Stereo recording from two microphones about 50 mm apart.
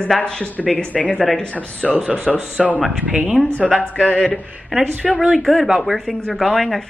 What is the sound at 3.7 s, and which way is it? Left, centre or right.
Speech, left.